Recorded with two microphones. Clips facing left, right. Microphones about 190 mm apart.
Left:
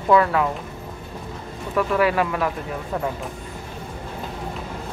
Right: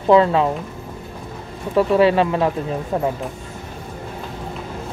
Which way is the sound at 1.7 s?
25° right (ahead or behind).